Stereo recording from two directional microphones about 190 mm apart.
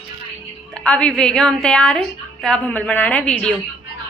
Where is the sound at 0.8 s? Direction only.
5° left (ahead or behind).